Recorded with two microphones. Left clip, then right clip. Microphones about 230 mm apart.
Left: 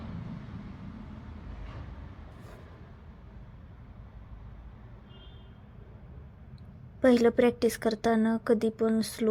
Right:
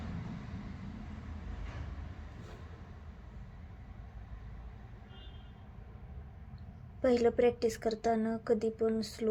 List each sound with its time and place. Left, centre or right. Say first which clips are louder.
7.0 s speech: left 5 dB; left